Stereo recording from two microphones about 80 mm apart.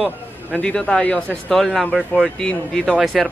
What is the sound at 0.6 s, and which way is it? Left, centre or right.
Speech, centre.